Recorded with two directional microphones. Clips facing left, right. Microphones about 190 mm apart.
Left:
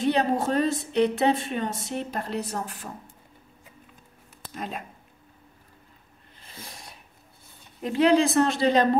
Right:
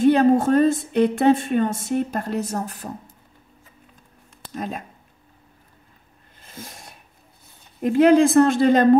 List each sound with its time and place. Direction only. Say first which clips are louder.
0.0 s a woman's voice: right 8 dB; 50° right (ahead or behind)
4.6 s a woman's voice: right 5 dB; 45° right (ahead or behind)
6.4 s sneeze: right 4 dB; 45° right (ahead or behind)
7.8 s a woman's voice: right 6 dB; 50° right (ahead or behind)